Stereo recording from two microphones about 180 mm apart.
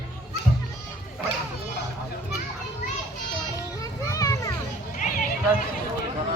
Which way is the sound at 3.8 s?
15° left (ahead or behind).